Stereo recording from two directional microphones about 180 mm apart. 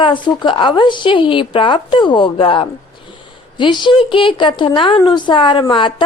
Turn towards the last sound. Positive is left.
turn(degrees=25)  # may be behind; listen again after turning